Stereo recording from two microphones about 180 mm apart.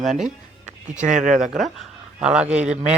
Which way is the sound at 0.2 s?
40° right (ahead or behind).